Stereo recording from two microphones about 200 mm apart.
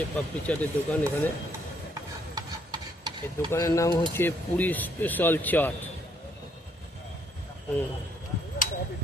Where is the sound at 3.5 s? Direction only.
15° left (ahead or behind).